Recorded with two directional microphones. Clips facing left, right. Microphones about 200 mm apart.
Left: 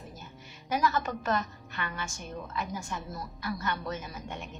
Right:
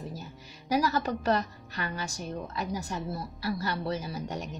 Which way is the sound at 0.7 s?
35° right (ahead or behind).